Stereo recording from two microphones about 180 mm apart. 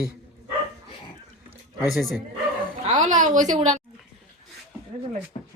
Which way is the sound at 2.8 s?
40° right (ahead or behind).